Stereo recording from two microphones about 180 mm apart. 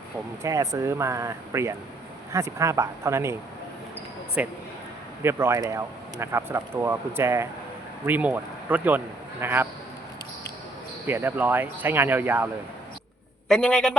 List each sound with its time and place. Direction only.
0.4 s speech: 15° right (ahead or behind)
4.4 s speech: 10° right (ahead or behind)
11.0 s speech: 10° right (ahead or behind)
13.5 s a man's voice: 5° left (ahead or behind)